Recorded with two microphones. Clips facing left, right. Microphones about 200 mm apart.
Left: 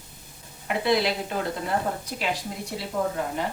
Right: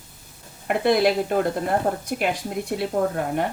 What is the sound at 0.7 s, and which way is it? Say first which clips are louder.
A woman's voice: right 5 dB; 50° right (ahead or behind).